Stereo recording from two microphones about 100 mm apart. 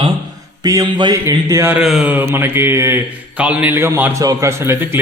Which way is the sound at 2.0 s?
20° right (ahead or behind).